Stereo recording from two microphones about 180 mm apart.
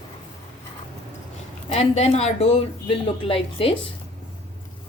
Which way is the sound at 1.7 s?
35° left (ahead or behind).